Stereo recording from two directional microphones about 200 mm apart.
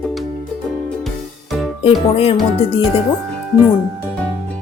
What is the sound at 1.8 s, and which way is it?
Speech, 30° left (ahead or behind).